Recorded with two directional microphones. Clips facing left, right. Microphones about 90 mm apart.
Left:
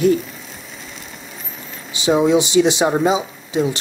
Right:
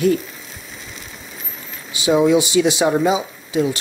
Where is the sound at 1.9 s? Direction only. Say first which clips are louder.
Even; 25° left (ahead or behind).